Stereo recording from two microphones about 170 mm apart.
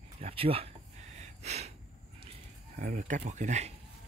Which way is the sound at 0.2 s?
35° right (ahead or behind).